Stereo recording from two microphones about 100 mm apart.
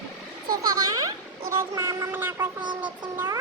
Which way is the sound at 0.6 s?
40° right (ahead or behind).